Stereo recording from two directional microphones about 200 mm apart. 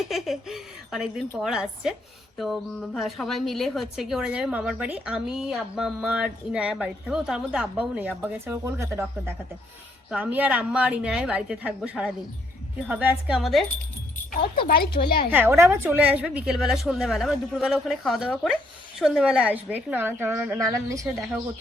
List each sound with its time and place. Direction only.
0.0 s a sound: centre (ahead or behind)
1.4 s a woman's voice: 5° right (ahead or behind)
14.7 s a woman's voice: 50° left (ahead or behind)
15.3 s a woman's voice: 10° right (ahead or behind)